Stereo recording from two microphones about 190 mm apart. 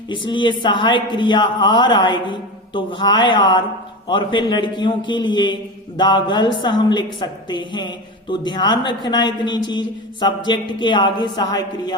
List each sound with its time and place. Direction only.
0.1 s a woman's voice: 25° left (ahead or behind)